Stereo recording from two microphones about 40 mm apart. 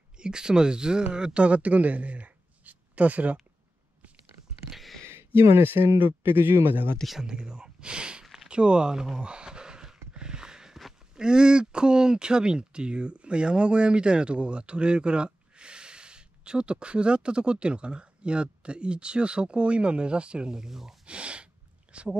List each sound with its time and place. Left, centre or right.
0.2 s speech: centre; by 3.3 s right
4.6 s a sound: centre
5.0 s speech: right
7.2 s speech: centre
9.2 s a sound: right
11.1 s speech: centre
21.0 s speech: right